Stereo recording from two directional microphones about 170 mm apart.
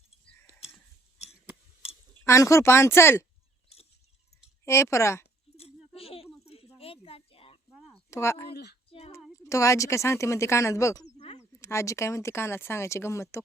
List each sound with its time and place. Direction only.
2.2 s speech: 15° left (ahead or behind)
4.6 s speech: 15° left (ahead or behind)
5.5 s a sound: 35° left (ahead or behind)
8.1 s speech: 15° left (ahead or behind)
8.9 s child singing: 35° left (ahead or behind)
9.4 s speech: 20° left (ahead or behind)